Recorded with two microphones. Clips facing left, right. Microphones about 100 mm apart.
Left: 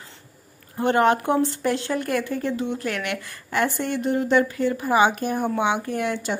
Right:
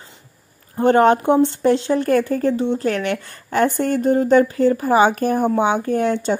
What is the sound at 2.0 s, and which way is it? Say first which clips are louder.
A woman's voice: right 8 dB; 40° right (ahead or behind).